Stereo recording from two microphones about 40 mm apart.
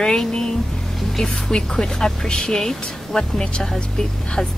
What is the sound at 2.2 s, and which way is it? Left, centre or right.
Speech, left.